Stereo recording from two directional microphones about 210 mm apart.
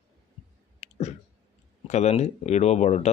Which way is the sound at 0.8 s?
30° left (ahead or behind).